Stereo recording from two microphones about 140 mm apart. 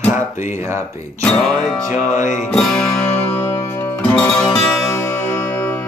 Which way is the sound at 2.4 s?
5° left (ahead or behind).